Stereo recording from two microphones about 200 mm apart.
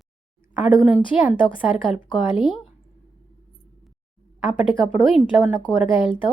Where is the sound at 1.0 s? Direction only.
30° left (ahead or behind).